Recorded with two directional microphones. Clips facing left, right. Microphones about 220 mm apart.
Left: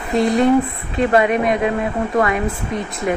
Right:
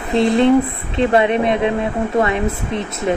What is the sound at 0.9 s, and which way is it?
Speech, 25° right (ahead or behind).